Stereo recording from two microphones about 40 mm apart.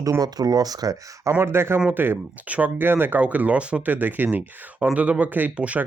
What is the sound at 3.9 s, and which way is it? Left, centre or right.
Speech, right.